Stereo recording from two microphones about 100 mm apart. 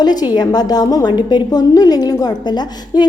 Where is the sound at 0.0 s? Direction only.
45° left (ahead or behind).